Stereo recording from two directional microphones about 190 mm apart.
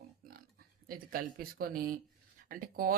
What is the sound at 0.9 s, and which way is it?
Speech, 50° right (ahead or behind).